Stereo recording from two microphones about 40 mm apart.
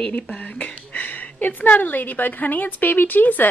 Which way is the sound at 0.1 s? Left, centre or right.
Left.